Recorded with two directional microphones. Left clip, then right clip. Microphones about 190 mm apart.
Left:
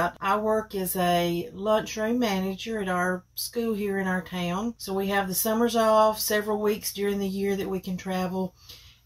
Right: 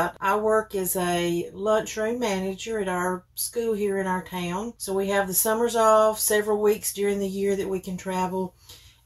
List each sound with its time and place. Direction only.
0.2 s speech: 15° right (ahead or behind)